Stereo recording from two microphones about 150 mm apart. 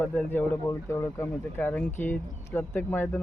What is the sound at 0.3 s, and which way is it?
Speech, 15° left (ahead or behind).